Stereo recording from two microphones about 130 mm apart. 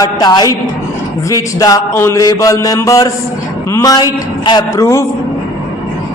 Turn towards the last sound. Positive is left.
turn(degrees=25)  # may be behind; listen again after turning